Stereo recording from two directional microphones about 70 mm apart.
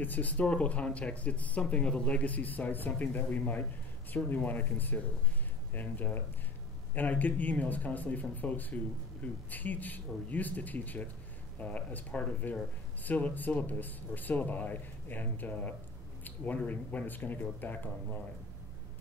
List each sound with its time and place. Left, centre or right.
0.0 s speech: left